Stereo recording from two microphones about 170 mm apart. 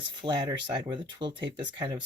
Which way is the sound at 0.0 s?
30° right (ahead or behind).